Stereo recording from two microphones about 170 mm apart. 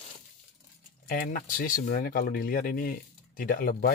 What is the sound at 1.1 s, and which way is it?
Speech, 55° left (ahead or behind).